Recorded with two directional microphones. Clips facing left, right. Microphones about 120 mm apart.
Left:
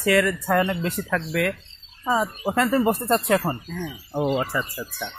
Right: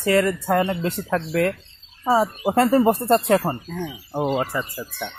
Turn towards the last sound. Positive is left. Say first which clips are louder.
# right 1 dB
turn(degrees=-15)  # may be behind; listen again after turning